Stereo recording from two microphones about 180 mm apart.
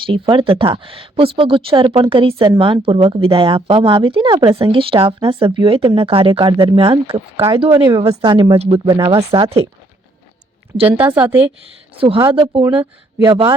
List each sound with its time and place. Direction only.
0.0 s speech: 30° right (ahead or behind)
10.8 s a woman's voice: 10° right (ahead or behind)
11.9 s speech: 30° right (ahead or behind)